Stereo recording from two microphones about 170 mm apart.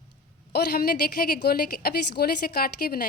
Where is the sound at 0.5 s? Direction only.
65° left (ahead or behind).